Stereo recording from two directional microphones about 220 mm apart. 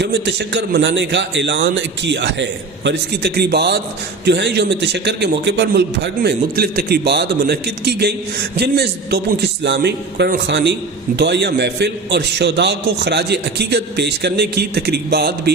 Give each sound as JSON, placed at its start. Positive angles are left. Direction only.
{"t": 0.0, "sound": "a man's voice", "side_deg": -50}